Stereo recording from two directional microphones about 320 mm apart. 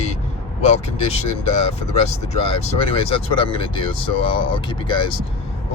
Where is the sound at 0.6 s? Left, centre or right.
Centre.